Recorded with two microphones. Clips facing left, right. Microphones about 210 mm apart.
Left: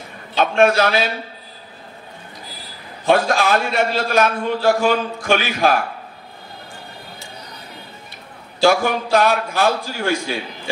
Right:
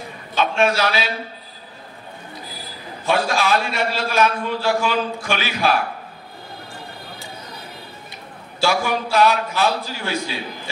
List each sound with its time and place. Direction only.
0.4 s a man's voice: 55° left (ahead or behind)
3.1 s a man's voice: 50° left (ahead or behind)
8.6 s a man's voice: 50° left (ahead or behind)